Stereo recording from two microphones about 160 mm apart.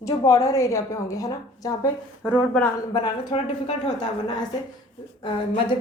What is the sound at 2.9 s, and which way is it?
Speech, 30° left (ahead or behind).